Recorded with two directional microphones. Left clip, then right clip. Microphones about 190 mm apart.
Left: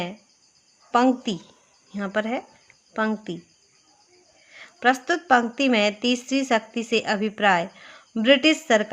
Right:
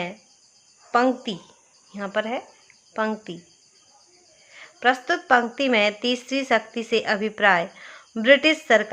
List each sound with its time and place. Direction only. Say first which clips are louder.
0.9 s speech: even; 25° left (ahead or behind)
4.5 s a woman's voice: even; 25° left (ahead or behind)